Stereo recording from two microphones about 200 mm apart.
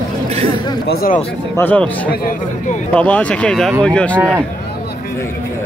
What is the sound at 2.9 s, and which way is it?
Speech, 5° left (ahead or behind).